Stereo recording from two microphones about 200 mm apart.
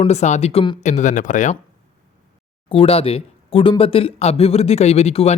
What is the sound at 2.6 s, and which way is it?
Speech, 30° left (ahead or behind).